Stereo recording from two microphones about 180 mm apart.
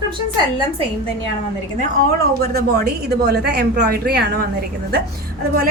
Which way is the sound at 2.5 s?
60° right (ahead or behind).